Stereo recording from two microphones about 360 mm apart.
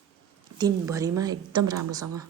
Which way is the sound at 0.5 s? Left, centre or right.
Centre.